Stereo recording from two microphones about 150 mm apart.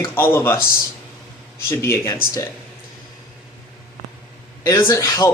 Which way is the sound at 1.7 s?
15° left (ahead or behind).